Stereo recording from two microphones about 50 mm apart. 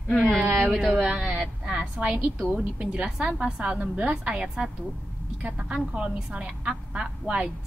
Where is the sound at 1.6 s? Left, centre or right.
Right.